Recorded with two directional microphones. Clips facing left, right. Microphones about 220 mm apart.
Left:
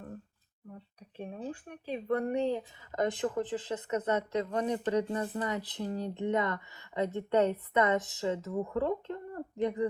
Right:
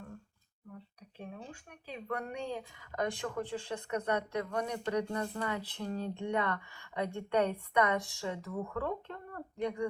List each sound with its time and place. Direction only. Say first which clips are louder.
1.3 s speech: left 10 dB; 35° left (ahead or behind)
2.2 s speech: left 9 dB; 20° left (ahead or behind)